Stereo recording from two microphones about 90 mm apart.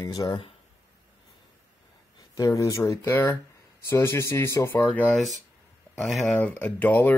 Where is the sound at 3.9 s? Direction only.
25° left (ahead or behind).